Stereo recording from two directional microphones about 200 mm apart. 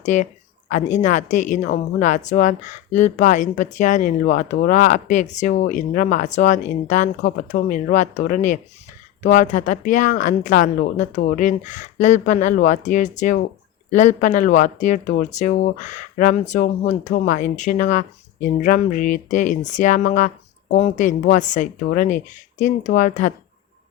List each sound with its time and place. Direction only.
0.0 s speech: 35° left (ahead or behind)